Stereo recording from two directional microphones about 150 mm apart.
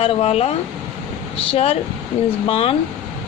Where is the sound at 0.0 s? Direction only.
40° left (ahead or behind).